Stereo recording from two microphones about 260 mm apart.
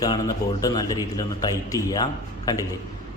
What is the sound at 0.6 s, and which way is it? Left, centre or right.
A man's voice, centre.